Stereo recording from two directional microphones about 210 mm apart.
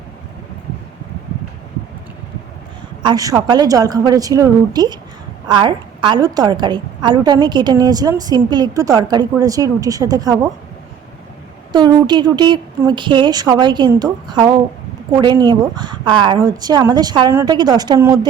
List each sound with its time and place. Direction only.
3.0 s a woman's voice: 20° right (ahead or behind)
11.7 s a woman's voice: 20° right (ahead or behind)